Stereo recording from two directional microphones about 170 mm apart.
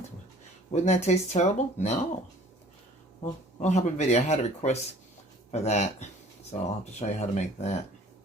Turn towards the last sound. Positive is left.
turn(degrees=40)  # may be behind; listen again after turning